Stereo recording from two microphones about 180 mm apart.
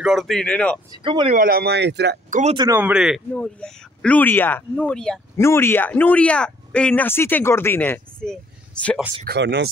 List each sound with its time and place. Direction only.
0.0 s speech: centre (ahead or behind)
1.0 s speech: 25° right (ahead or behind)
1.3 s speech: 55° right (ahead or behind)
2.5 s speech: 25° right (ahead or behind)
2.8 s speech: 5° right (ahead or behind)
9.2 s speech: 65° right (ahead or behind)